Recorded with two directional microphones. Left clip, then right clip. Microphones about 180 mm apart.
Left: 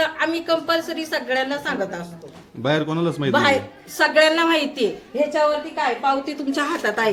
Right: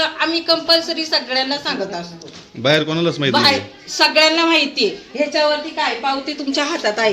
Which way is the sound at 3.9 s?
15° left (ahead or behind).